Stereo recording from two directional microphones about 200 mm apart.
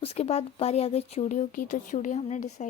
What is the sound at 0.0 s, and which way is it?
Speech, 30° left (ahead or behind).